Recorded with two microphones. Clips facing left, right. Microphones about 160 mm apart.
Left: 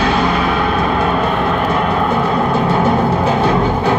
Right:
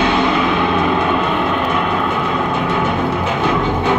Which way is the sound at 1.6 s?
35° left (ahead or behind).